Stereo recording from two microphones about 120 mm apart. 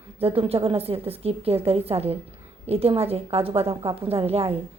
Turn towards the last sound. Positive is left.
turn(degrees=-55)  # may be behind; listen again after turning